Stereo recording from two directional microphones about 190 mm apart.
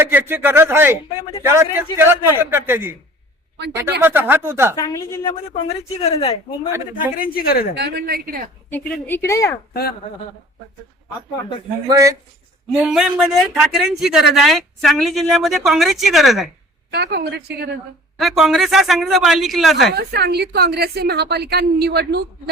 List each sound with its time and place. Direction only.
0.0 s speech: 10° right (ahead or behind)
4.0 s speech: 10° right (ahead or behind)
4.8 s a woman's voice: 15° left (ahead or behind)
5.3 s speech: 30° left (ahead or behind)
7.2 s speech: 50° left (ahead or behind)
7.8 s a woman's voice: 55° right (ahead or behind)
8.9 s a woman's voice: 10° left (ahead or behind)
11.9 s speech: 15° right (ahead or behind)
12.8 s speech: 5° right (ahead or behind)
16.9 s a woman's voice: 60° right (ahead or behind)
18.2 s speech: centre (ahead or behind)
19.9 s a woman's voice: 60° right (ahead or behind)